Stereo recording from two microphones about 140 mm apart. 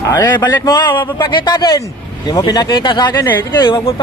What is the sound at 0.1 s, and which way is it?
A man's voice, 30° left (ahead or behind).